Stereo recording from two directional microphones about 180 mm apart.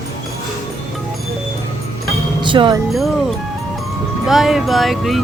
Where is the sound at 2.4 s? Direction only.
25° right (ahead or behind).